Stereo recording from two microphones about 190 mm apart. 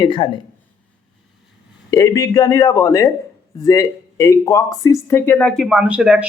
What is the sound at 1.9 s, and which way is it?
A man's voice, 20° left (ahead or behind).